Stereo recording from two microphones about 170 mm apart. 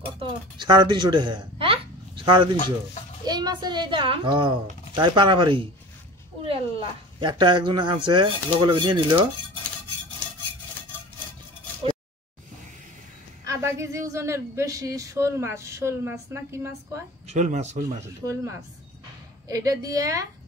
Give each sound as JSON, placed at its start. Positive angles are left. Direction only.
{"t": 0.2, "sound": "speech", "side_deg": -25}
{"t": 2.5, "sound": "speech", "side_deg": 45}
{"t": 3.3, "sound": "speech", "side_deg": -25}
{"t": 13.7, "sound": "speech", "side_deg": -20}
{"t": 17.3, "sound": "speech", "side_deg": -45}
{"t": 17.8, "sound": "speech", "side_deg": -15}